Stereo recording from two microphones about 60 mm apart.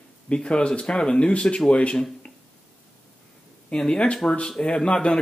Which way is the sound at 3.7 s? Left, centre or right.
Centre.